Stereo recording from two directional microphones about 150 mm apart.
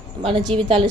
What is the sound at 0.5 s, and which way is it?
Speech, 40° right (ahead or behind).